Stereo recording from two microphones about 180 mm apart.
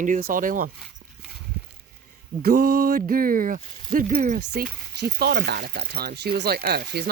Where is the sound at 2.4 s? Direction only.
60° right (ahead or behind).